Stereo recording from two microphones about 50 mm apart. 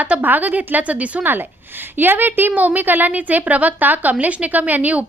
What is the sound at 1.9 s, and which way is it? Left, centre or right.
A woman's voice, right.